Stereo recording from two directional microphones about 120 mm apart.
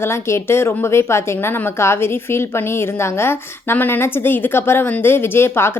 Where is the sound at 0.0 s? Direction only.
20° left (ahead or behind).